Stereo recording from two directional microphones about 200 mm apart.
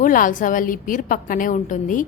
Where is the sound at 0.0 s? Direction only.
40° left (ahead or behind).